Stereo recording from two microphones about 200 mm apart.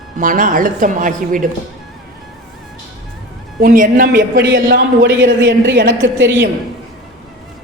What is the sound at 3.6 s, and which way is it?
A man's voice, 45° right (ahead or behind).